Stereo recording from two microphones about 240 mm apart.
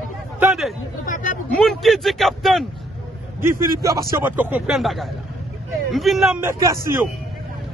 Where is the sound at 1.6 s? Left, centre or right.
Centre.